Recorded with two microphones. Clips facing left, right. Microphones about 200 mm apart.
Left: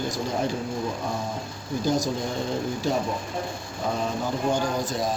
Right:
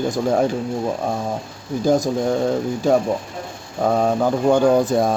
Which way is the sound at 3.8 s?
65° right (ahead or behind).